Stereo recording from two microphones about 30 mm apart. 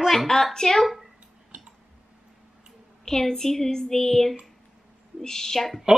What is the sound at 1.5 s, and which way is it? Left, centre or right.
Tick-tock, right.